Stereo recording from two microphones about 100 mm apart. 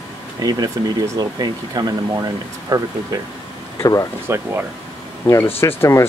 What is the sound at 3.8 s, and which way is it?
Speech, 35° left (ahead or behind).